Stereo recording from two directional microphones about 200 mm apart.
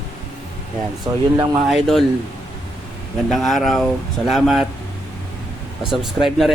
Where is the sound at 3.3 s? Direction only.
Centre (ahead or behind).